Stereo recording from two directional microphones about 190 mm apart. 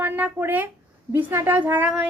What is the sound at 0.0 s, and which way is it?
A woman's voice, 10° right (ahead or behind).